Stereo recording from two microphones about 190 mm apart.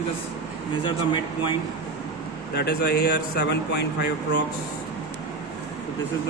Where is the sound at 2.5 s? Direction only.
60° left (ahead or behind).